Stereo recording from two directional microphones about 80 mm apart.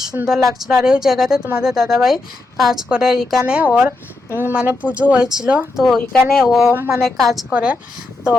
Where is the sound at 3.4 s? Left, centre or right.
Centre.